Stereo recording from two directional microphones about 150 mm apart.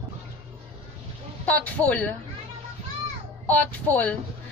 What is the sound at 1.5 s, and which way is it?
Speech, 10° left (ahead or behind).